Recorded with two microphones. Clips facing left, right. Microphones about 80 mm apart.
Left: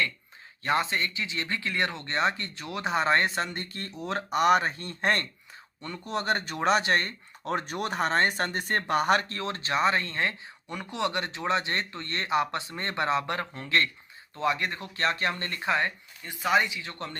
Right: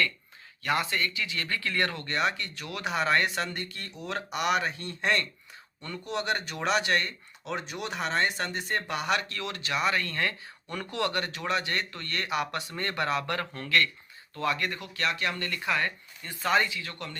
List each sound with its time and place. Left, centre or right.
0.6 s speech: left
16.2 s speech: centre